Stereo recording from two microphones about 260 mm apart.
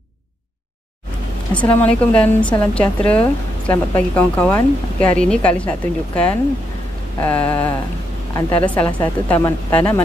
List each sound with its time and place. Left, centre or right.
1.5 s a woman's voice: centre
7.2 s a sound: centre
8.4 s a woman's voice: centre
8.6 s a woman's voice: centre